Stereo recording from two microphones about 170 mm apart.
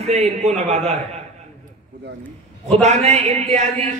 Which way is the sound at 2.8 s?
40° right (ahead or behind).